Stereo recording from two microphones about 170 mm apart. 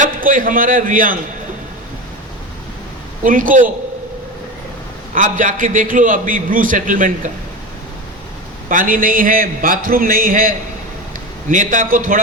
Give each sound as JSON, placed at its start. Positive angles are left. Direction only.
{"t": 0.0, "sound": "a man's voice", "side_deg": -50}
{"t": 3.2, "sound": "a man's voice", "side_deg": -50}
{"t": 5.1, "sound": "a man's voice", "side_deg": -50}
{"t": 8.7, "sound": "a man's voice", "side_deg": -55}